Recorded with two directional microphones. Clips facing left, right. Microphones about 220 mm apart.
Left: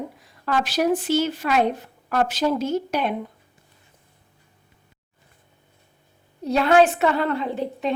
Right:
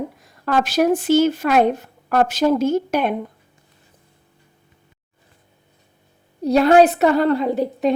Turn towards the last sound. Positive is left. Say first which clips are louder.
# right 7 dB
turn(degrees=-40)  # may be behind; listen again after turning